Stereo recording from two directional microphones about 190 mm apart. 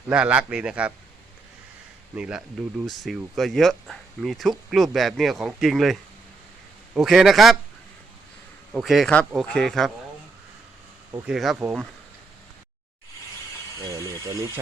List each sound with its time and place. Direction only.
0.1 s a man's voice: 5° right (ahead or behind)
2.1 s speech: 5° right (ahead or behind)
8.7 s speech: centre (ahead or behind)
11.3 s speech: centre (ahead or behind)
13.8 s a man's voice: 15° right (ahead or behind)